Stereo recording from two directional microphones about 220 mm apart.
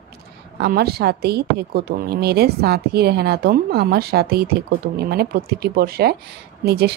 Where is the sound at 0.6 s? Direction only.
45° right (ahead or behind).